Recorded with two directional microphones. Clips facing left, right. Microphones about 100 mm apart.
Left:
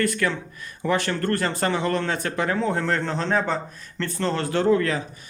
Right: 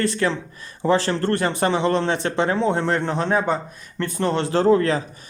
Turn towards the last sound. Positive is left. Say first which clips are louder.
# right 3 dB
turn(degrees=-30)  # may be behind; listen again after turning